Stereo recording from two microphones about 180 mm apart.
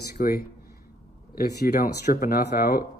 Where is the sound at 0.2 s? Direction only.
50° left (ahead or behind).